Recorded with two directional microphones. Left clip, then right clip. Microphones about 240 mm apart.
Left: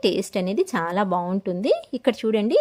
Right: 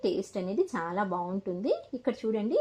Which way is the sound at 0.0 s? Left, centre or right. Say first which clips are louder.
Left 8 dB; left.